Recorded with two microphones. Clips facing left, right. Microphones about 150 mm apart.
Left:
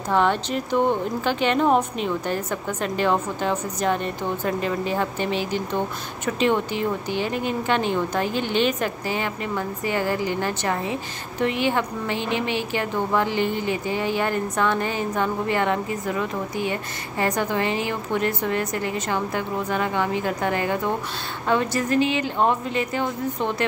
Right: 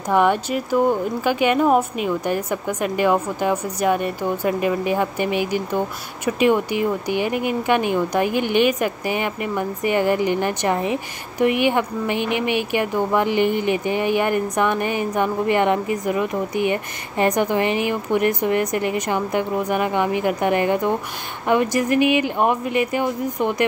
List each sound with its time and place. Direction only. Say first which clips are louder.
0.1 s speech: right 3 dB; 10° right (ahead or behind)